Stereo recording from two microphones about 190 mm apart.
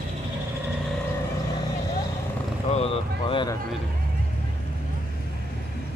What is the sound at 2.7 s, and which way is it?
Speech, 30° left (ahead or behind).